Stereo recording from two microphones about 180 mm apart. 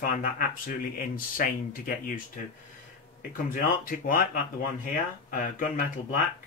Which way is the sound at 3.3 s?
50° left (ahead or behind).